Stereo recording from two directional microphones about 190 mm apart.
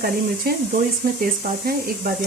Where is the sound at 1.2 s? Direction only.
50° right (ahead or behind).